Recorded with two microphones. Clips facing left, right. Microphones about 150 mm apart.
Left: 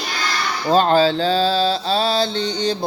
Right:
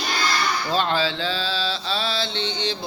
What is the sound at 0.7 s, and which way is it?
Mantra, 45° left (ahead or behind).